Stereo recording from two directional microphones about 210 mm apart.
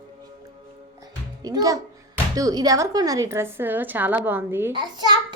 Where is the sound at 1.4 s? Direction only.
20° right (ahead or behind).